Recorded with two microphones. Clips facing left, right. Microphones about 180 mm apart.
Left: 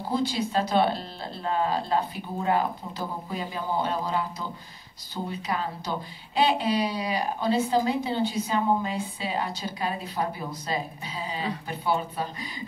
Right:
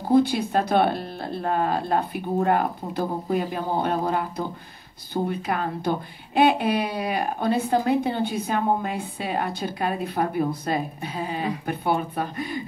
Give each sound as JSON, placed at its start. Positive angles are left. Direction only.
{"t": 0.1, "sound": "a woman's voice", "side_deg": -60}